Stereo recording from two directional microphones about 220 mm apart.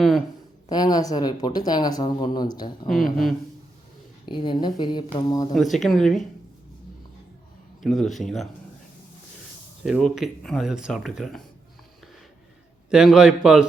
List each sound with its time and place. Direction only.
0.7 s speech: 15° left (ahead or behind)
2.9 s speech: centre (ahead or behind)
4.3 s speech: 20° left (ahead or behind)
5.5 s speech: centre (ahead or behind)
7.8 s speech: centre (ahead or behind)
9.8 s speech: centre (ahead or behind)
12.9 s speech: 5° right (ahead or behind)